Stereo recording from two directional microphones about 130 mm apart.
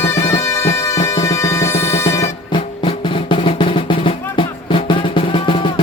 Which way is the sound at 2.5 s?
40° left (ahead or behind).